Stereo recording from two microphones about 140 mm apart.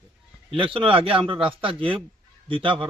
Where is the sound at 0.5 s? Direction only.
40° right (ahead or behind).